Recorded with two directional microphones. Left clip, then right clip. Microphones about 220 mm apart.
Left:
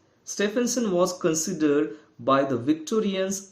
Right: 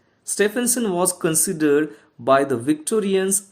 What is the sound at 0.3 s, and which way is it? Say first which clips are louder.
Speech: right 5 dB; 50° right (ahead or behind).